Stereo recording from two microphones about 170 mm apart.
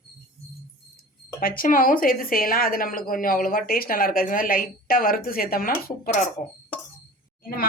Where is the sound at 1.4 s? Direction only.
55° left (ahead or behind).